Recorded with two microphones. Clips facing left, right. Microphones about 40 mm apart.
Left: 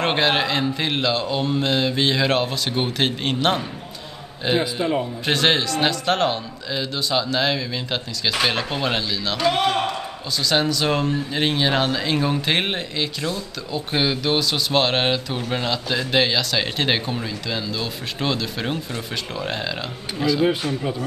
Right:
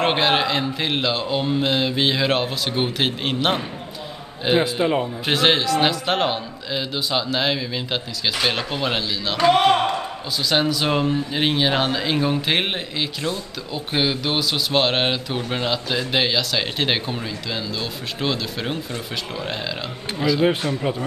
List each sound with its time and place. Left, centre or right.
0.0 s speech: centre
5.2 s speech: centre
9.4 s speech: right
10.4 s speech: centre